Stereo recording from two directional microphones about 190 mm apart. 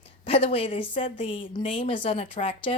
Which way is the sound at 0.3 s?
30° left (ahead or behind).